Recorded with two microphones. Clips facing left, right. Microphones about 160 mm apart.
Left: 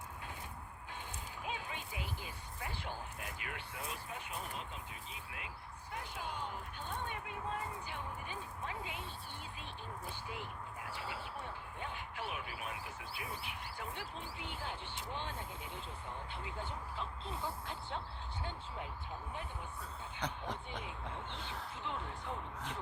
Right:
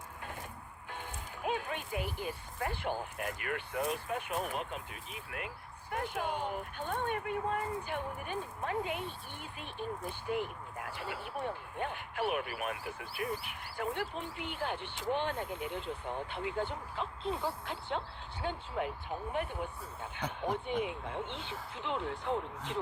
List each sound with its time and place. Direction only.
0.9 s speech: 55° right (ahead or behind); by 22.4 s 75° right (ahead or behind)